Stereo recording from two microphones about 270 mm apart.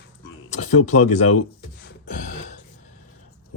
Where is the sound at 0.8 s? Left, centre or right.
Left.